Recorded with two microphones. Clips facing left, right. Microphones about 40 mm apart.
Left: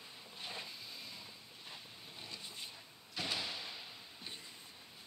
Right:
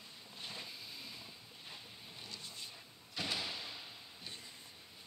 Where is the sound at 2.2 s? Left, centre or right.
Centre.